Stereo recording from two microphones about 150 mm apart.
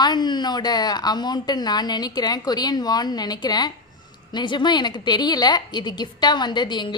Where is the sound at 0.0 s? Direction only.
30° left (ahead or behind).